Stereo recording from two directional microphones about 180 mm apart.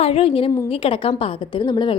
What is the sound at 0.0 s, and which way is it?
A woman's voice, 30° left (ahead or behind).